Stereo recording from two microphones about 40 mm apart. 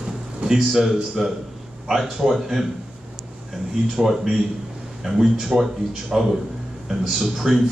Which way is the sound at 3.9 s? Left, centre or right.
Centre.